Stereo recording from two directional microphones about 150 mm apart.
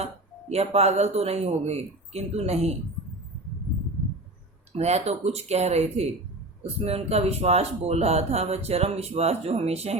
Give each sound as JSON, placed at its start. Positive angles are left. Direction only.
{"t": 0.0, "sound": "speech", "side_deg": -45}
{"t": 4.7, "sound": "speech", "side_deg": -45}